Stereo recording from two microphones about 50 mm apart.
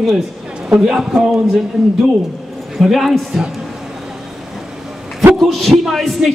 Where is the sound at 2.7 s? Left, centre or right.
Centre.